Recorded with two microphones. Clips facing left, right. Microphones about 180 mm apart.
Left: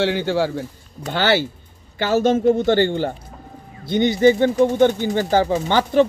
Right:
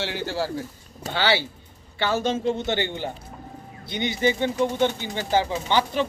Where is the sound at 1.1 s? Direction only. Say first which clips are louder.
Left 5 dB; 50° left (ahead or behind).